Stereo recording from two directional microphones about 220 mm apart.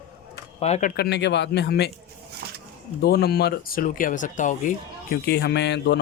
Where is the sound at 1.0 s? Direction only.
50° left (ahead or behind).